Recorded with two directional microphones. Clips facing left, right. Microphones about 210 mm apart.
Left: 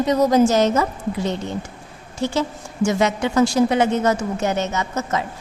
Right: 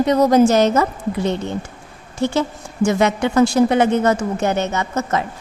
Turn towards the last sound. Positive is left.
turn(degrees=-60)  # may be behind; listen again after turning